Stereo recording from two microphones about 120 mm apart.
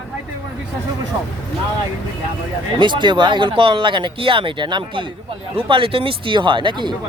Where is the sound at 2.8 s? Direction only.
40° right (ahead or behind).